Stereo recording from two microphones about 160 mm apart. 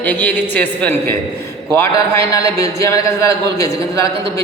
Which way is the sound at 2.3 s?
20° left (ahead or behind).